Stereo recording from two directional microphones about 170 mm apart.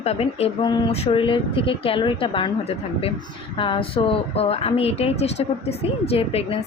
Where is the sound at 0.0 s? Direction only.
35° left (ahead or behind).